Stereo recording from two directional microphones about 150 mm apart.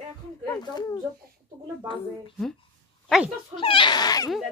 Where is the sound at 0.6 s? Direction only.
25° left (ahead or behind).